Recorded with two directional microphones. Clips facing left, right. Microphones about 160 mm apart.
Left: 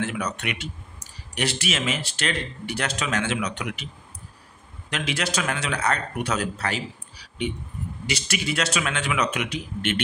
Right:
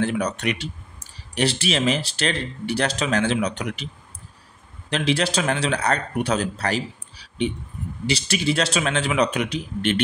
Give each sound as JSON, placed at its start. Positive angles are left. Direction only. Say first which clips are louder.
{"t": 0.0, "sound": "speech", "louder": "right 5 dB", "side_deg": -35}